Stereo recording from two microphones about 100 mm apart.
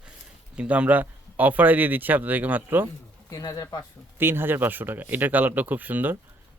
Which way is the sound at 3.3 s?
40° left (ahead or behind).